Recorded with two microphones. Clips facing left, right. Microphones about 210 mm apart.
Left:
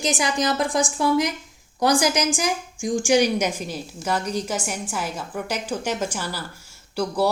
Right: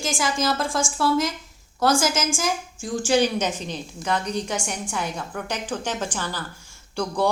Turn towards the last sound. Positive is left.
turn(degrees=5)  # may be behind; listen again after turning